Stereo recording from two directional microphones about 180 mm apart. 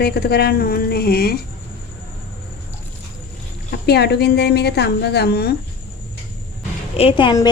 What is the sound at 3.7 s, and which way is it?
A woman's voice, 65° left (ahead or behind).